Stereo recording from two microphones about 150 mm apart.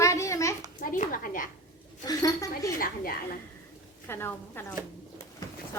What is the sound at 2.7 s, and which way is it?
Speech, 75° left (ahead or behind).